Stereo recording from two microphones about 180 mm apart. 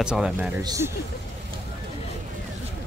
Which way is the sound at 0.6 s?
15° right (ahead or behind).